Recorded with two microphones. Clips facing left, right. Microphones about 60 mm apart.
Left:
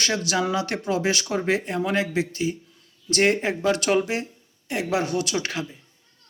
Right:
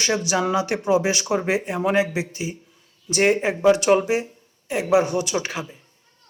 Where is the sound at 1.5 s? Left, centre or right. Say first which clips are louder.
Right 2 dB; centre.